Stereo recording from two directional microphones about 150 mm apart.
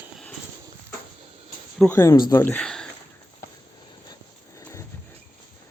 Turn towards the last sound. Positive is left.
turn(degrees=20)  # may be behind; listen again after turning